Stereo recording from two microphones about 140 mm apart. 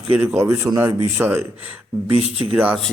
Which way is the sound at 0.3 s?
20° right (ahead or behind).